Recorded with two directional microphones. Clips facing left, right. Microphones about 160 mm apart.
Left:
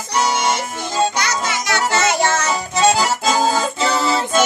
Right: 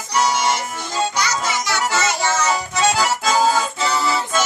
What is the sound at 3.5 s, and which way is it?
Music, 25° left (ahead or behind).